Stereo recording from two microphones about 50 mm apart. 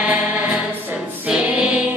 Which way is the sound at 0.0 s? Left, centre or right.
Right.